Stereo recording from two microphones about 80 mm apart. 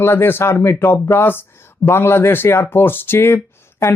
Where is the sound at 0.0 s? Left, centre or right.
Left.